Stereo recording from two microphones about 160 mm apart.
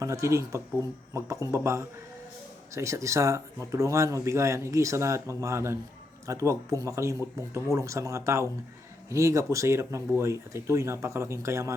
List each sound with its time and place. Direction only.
0.0 s speech: 20° right (ahead or behind)